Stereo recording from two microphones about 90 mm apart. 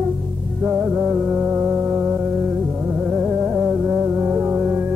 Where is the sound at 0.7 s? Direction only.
15° right (ahead or behind).